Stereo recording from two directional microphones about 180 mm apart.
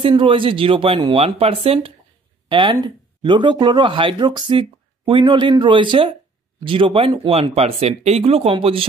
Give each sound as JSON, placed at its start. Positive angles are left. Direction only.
{"t": 0.0, "sound": "speech", "side_deg": -30}